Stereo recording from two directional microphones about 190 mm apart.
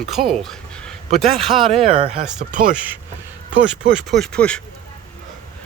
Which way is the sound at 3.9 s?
Centre (ahead or behind).